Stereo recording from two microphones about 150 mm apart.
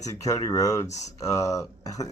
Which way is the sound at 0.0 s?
20° left (ahead or behind).